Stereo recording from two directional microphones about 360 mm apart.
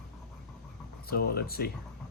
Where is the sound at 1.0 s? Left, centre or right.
Left.